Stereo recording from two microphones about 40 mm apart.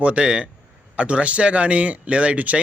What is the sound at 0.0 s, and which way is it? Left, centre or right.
Speech, right.